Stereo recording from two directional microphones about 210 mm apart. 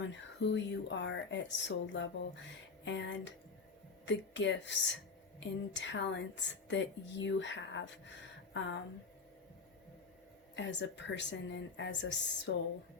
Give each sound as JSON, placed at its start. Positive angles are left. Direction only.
{"t": 0.1, "sound": "speech", "side_deg": 60}
{"t": 10.5, "sound": "speech", "side_deg": 55}